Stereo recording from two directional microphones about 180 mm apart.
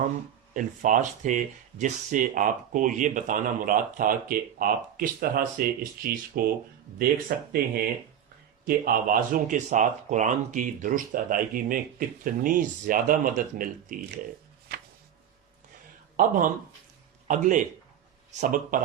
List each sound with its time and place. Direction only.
0.5 s speech: 45° right (ahead or behind)
8.6 s speech: 50° right (ahead or behind)
16.1 s speech: 45° right (ahead or behind)